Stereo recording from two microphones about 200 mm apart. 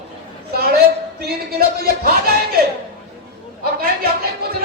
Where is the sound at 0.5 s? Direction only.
50° right (ahead or behind).